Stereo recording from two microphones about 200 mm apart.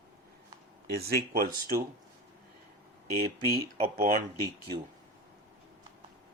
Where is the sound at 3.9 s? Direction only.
45° right (ahead or behind).